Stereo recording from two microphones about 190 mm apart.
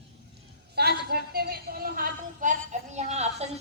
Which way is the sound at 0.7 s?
55° right (ahead or behind).